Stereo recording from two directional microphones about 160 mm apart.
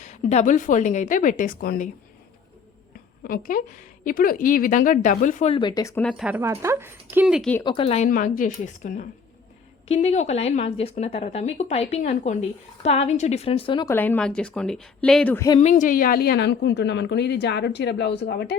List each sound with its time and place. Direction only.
0.0 s a woman's voice: 45° left (ahead or behind); by 1.9 s 60° left (ahead or behind)
3.2 s a woman's voice: 60° left (ahead or behind)
5.5 s speech: 30° left (ahead or behind)
6.0 s a woman's voice: 5° left (ahead or behind)
6.2 s speech: 10° right (ahead or behind)
7.6 s a woman's voice: 30° left (ahead or behind)
8.1 s a woman's voice: 55° left (ahead or behind)
9.9 s a woman's voice: 40° left (ahead or behind)
13.8 s a woman's voice: 15° left (ahead or behind)
15.7 s a woman's voice: 60° left (ahead or behind); by 18.5 s 90° left